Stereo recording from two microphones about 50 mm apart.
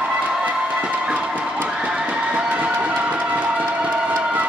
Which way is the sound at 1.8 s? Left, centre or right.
Centre.